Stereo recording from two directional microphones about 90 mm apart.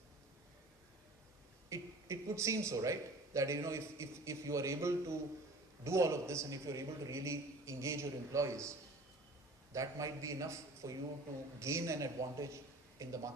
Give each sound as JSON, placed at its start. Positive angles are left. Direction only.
{"t": 1.7, "sound": "a man's voice", "side_deg": -35}
{"t": 9.7, "sound": "a man's voice", "side_deg": -35}